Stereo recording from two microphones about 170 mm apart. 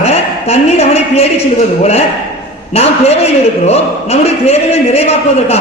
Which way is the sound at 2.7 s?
40° left (ahead or behind).